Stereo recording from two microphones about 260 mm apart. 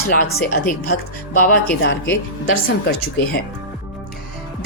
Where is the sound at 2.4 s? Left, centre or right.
Left.